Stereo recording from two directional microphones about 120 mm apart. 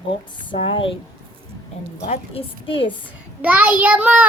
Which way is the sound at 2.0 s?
65° left (ahead or behind).